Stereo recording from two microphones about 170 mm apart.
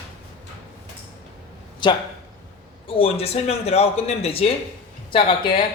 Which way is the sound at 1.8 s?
25° left (ahead or behind).